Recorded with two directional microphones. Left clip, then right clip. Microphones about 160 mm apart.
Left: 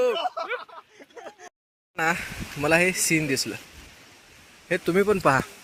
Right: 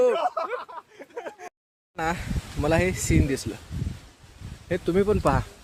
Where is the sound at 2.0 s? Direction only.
10° right (ahead or behind).